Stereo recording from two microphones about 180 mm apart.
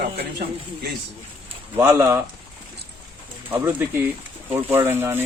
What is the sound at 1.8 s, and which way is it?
Speech, 15° right (ahead or behind).